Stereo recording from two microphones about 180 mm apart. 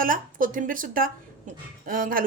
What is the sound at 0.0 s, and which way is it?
A woman's voice, 50° right (ahead or behind).